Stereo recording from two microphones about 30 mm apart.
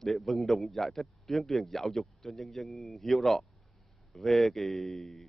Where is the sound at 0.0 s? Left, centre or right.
Centre.